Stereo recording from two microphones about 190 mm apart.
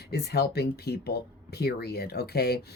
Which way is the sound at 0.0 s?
55° left (ahead or behind).